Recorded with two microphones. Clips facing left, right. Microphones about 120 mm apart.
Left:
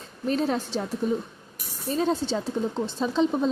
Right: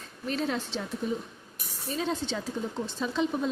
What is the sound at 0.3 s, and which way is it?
Speech, 40° left (ahead or behind).